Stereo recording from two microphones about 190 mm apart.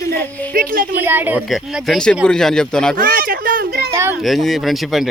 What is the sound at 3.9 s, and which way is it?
Speech, 15° right (ahead or behind).